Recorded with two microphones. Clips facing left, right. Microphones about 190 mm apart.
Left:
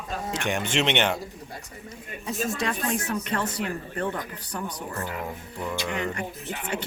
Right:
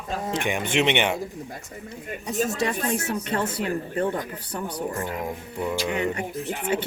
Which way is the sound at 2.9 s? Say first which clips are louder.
Right 2 dB; 35° right (ahead or behind).